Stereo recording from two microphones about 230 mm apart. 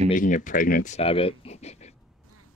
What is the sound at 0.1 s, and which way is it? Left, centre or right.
Speech, left.